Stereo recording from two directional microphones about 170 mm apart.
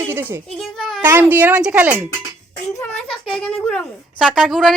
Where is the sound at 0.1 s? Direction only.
15° right (ahead or behind).